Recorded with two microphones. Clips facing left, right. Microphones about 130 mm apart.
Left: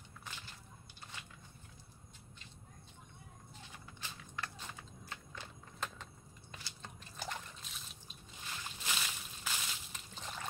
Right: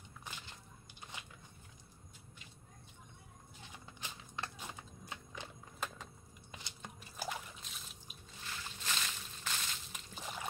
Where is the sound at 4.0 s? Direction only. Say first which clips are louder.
Right 1 dB; 20° right (ahead or behind).